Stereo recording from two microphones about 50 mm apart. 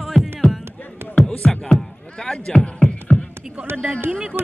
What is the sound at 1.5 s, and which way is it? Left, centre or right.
Music, centre.